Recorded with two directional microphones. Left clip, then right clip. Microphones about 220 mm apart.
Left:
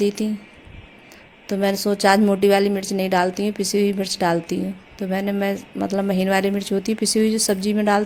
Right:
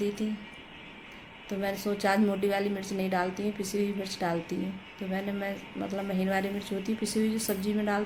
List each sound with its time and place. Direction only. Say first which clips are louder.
0.2 s a woman's voice: left 9 dB; 45° left (ahead or behind)
1.5 s a woman's voice: left 11 dB; 45° left (ahead or behind)